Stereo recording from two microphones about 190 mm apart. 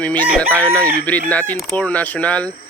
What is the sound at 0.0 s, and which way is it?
Speech, 10° left (ahead or behind).